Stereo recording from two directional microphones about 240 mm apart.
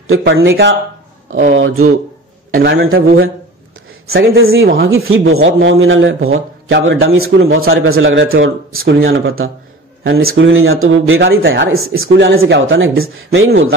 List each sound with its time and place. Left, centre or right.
0.2 s speech: right
1.5 s a man's voice: right
2.5 s speech: right
4.4 s a man's voice: right
4.6 s speech: right
4.9 s a man's voice: right
10.0 s speech: right